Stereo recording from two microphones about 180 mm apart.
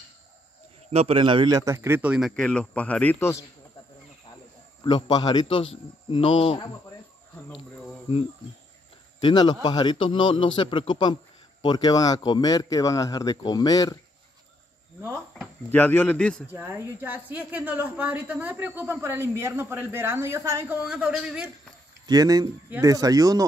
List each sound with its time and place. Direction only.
0.9 s a man's voice: 30° right (ahead or behind); by 3.4 s 15° left (ahead or behind)
4.8 s speech: 25° left (ahead or behind)
9.2 s speech: 25° left (ahead or behind)
15.7 s speech: 10° left (ahead or behind)
16.5 s a woman's voice: 10° right (ahead or behind)
22.0 s speech: 20° right (ahead or behind)